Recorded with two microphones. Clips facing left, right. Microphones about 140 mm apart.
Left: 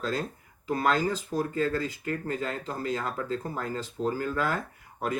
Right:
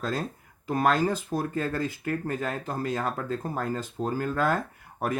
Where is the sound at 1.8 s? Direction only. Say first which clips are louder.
Right 3 dB; 55° right (ahead or behind).